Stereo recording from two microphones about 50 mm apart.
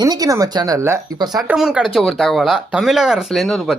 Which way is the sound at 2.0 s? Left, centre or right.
Centre.